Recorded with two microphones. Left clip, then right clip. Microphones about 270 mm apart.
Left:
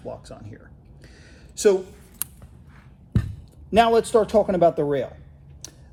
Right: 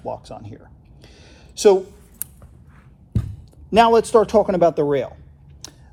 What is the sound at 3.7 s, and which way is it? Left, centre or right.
A man's voice, centre.